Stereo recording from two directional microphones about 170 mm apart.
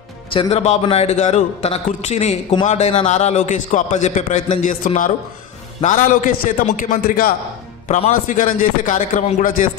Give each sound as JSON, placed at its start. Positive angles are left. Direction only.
{"t": 0.3, "sound": "a man's voice", "side_deg": 35}